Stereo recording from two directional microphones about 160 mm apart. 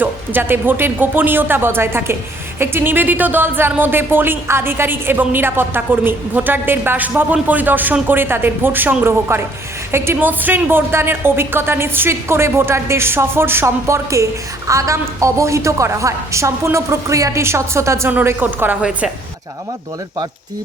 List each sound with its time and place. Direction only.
0.0 s speech: 15° right (ahead or behind)